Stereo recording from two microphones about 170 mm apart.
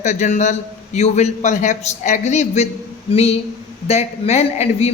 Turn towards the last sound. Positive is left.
turn(degrees=40)  # may be behind; listen again after turning